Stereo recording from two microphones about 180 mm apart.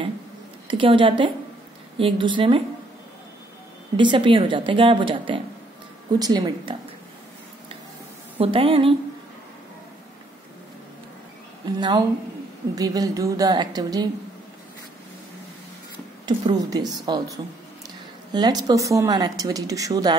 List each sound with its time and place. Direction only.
0.7 s speech: 30° right (ahead or behind)
3.9 s speech: 25° right (ahead or behind)
8.4 s a woman's voice: 30° right (ahead or behind)
11.6 s speech: 25° right (ahead or behind)
16.3 s speech: 20° right (ahead or behind)